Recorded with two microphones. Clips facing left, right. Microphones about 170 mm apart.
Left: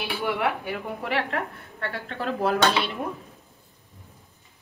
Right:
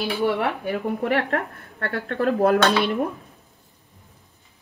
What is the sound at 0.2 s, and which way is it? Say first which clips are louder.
A woman's voice: right 2 dB; 40° right (ahead or behind).